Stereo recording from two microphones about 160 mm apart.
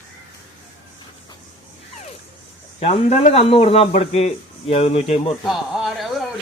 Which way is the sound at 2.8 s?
40° left (ahead or behind).